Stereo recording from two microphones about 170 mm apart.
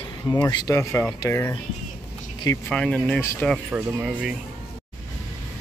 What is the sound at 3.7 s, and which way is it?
Speech, 5° right (ahead or behind).